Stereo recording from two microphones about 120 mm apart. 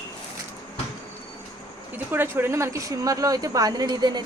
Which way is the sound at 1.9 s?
15° right (ahead or behind).